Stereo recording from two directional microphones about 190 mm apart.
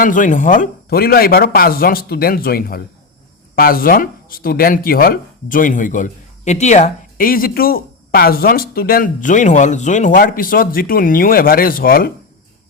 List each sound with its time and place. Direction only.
0.0 s speech: 45° left (ahead or behind)